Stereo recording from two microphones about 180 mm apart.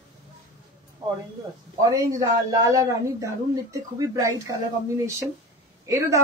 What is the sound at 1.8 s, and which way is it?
Speech, 20° right (ahead or behind).